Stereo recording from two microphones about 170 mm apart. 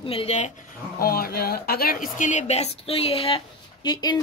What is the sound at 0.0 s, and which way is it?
Speech, 35° left (ahead or behind).